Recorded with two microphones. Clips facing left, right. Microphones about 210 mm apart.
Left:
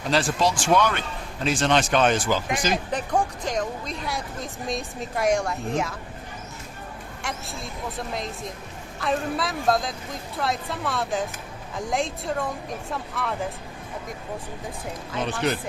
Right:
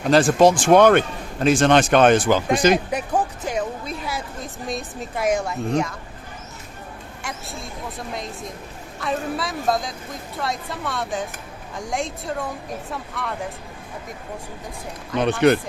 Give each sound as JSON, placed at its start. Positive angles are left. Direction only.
{"t": 0.1, "sound": "speech", "side_deg": -50}
{"t": 2.9, "sound": "a woman's voice", "side_deg": -10}
{"t": 7.2, "sound": "a woman's voice", "side_deg": 0}
{"t": 15.1, "sound": "speech", "side_deg": -60}